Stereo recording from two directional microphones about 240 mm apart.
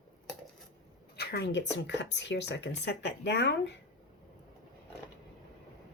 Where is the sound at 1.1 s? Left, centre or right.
Left.